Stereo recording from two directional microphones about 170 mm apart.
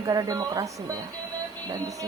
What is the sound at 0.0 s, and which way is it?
Speech, 20° right (ahead or behind).